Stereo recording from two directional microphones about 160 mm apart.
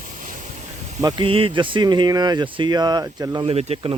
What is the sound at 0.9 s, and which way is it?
Speech, 25° right (ahead or behind).